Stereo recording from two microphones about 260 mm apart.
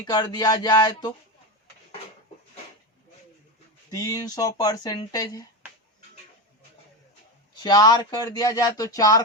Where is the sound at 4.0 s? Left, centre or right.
Centre.